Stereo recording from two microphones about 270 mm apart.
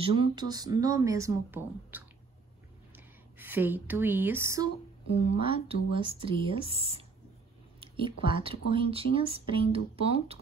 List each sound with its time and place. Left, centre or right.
0.0 s speech: centre
3.3 s speech: centre
5.1 s speech: right